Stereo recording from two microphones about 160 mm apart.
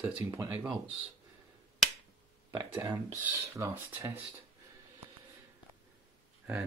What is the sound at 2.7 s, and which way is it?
Speech, 10° right (ahead or behind).